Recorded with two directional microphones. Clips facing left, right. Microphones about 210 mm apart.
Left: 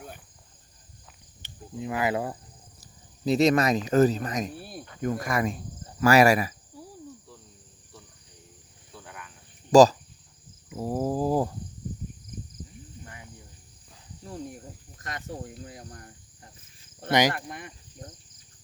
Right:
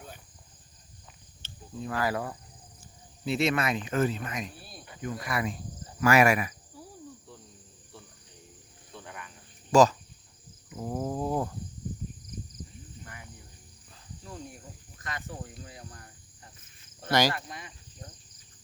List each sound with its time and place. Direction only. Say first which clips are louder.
1.4 s speech: left 3 dB; 15° left (ahead or behind)
3.2 s speech: left 6 dB; 40° left (ahead or behind)
6.0 s speech: left 3 dB; 35° left (ahead or behind)
8.9 s cricket: right 1 dB; centre (ahead or behind)
9.7 s speech: left 5 dB; 35° left (ahead or behind)
10.7 s a sound: left 5 dB; 30° left (ahead or behind)
15.6 s cricket: left 4 dB; 45° left (ahead or behind)
17.1 s speech: left 3 dB; 20° left (ahead or behind)
17.3 s cricket: left 2 dB; 55° left (ahead or behind)